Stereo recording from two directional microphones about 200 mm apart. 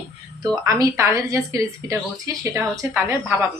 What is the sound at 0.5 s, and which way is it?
Speech, 15° right (ahead or behind).